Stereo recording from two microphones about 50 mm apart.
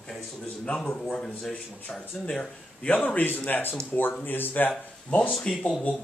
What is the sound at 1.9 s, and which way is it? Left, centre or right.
Speech, left.